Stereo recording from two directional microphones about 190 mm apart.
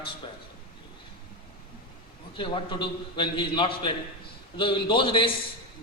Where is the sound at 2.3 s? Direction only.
25° left (ahead or behind).